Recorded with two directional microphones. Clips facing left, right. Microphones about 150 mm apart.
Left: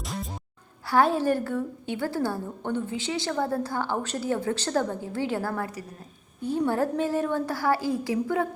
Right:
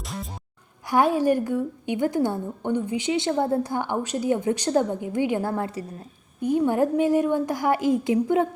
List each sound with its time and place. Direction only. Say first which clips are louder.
0.0 s music: even; centre (ahead or behind)
0.9 s a woman's voice: right 2 dB; 15° right (ahead or behind)